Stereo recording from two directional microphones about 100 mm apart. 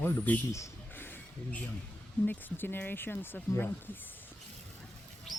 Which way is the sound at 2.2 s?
20° left (ahead or behind).